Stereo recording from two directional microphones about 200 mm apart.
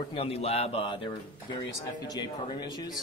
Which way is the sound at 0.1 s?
30° left (ahead or behind).